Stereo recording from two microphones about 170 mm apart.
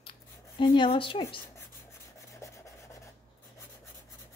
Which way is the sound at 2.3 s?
15° left (ahead or behind).